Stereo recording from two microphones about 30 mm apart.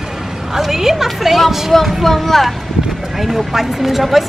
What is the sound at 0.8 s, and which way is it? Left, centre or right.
Speech, centre.